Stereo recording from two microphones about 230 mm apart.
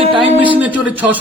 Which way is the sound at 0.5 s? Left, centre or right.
Centre.